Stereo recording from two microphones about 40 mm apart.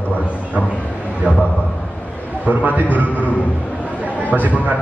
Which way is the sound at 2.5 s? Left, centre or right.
Right.